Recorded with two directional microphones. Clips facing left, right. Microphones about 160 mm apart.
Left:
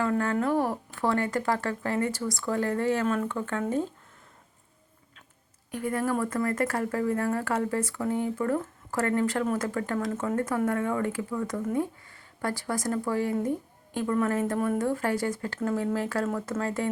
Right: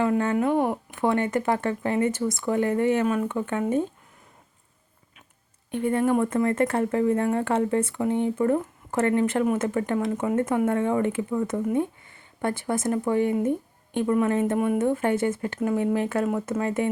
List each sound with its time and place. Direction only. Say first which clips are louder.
0.0 s speech: right 4 dB; 20° right (ahead or behind)
5.7 s speech: right 6 dB; 25° right (ahead or behind)